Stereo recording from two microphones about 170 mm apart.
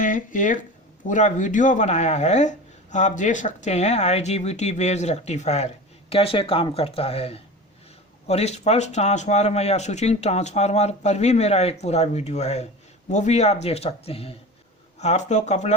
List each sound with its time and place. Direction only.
0.0 s speech: 50° left (ahead or behind)